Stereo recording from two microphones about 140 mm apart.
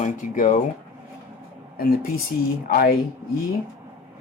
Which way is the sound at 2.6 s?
90° left.